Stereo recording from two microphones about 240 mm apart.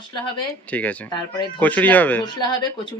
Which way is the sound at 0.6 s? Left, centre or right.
Centre.